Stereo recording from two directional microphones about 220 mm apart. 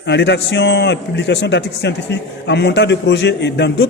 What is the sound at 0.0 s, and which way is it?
A man's voice, 50° left (ahead or behind).